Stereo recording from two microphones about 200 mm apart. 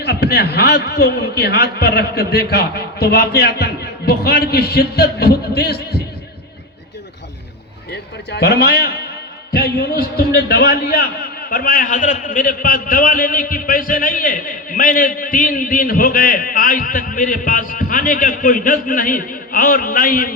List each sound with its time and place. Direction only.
0.0 s a man's voice: 55° left (ahead or behind)
7.9 s a man's voice: 55° left (ahead or behind)